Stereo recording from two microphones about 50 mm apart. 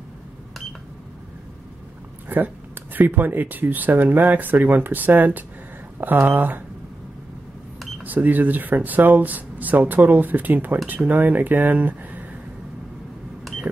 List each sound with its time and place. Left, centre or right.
2.2 s speech: right
8.0 s speech: right